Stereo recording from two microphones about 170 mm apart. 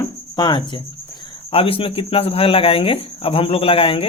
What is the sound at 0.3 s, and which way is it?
Speech, 25° left (ahead or behind).